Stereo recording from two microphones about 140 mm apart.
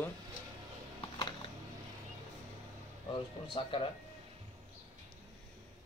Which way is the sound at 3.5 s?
40° left (ahead or behind).